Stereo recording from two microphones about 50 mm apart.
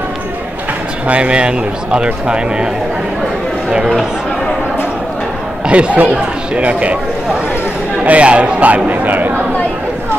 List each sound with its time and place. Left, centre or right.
1.0 s a man's voice: right
5.7 s speech: right
8.0 s speech: right